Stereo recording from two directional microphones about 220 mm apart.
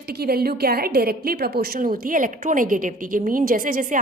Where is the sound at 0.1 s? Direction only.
45° right (ahead or behind).